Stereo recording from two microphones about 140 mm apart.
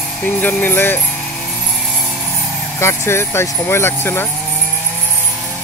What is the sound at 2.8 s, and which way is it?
Speech, 20° left (ahead or behind).